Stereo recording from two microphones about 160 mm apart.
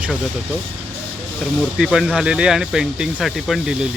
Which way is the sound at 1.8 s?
Centre (ahead or behind).